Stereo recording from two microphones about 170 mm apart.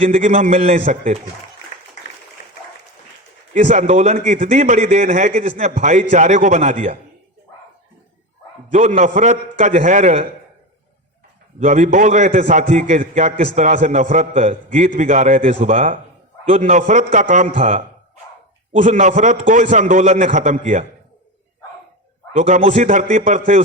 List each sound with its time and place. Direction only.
0.0 s a man's voice: 40° right (ahead or behind)
3.5 s a man's voice: 45° right (ahead or behind)
8.7 s a man's voice: 45° right (ahead or behind)
11.6 s a man's voice: 45° right (ahead or behind)
18.9 s a man's voice: 45° right (ahead or behind)
22.4 s a man's voice: 45° right (ahead or behind)
22.6 s a man's voice: 35° right (ahead or behind)
22.9 s a man's voice: 45° right (ahead or behind)